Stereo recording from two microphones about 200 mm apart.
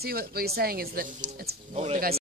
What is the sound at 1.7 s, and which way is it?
Speech, 30° right (ahead or behind).